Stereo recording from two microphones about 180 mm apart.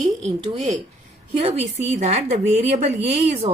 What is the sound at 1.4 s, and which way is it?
A woman's voice, 35° right (ahead or behind).